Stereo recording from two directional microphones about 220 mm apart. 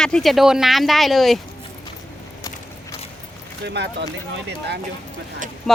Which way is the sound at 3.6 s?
50° right (ahead or behind).